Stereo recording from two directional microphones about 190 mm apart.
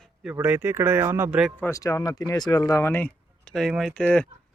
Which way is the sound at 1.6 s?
15° left (ahead or behind).